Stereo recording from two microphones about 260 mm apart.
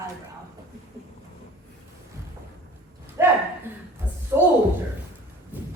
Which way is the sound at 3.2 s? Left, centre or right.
Centre.